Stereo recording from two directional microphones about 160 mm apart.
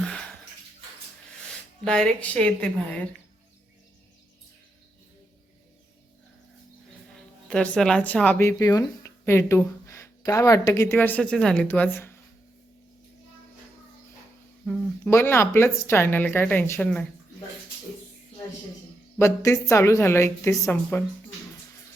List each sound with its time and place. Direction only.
1.8 s speech: 5° left (ahead or behind)
7.5 s speech: 5° left (ahead or behind)
14.6 s a sound: 5° left (ahead or behind)
15.1 s speech: 15° left (ahead or behind)
19.1 s speech: 20° left (ahead or behind)